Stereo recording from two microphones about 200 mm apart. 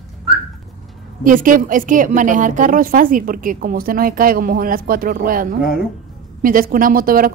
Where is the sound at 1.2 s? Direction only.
40° right (ahead or behind).